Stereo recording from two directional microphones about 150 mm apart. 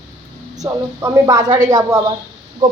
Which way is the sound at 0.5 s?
25° right (ahead or behind).